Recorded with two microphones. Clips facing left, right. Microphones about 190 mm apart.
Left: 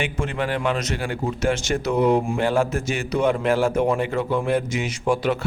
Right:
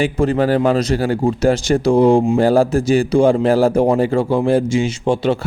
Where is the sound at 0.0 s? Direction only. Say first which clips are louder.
Right 10 dB; 35° right (ahead or behind).